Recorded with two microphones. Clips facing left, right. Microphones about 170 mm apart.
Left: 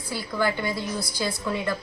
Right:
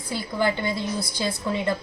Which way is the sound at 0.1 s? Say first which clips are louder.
Right 2 dB; 20° right (ahead or behind).